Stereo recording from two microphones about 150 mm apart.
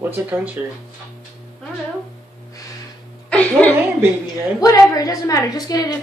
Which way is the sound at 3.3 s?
10° left (ahead or behind).